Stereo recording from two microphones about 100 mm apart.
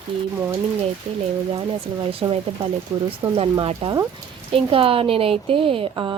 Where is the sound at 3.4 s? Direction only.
65° right (ahead or behind).